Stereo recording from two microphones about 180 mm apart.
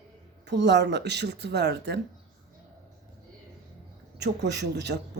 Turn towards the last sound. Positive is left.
turn(degrees=-70)  # may be behind; listen again after turning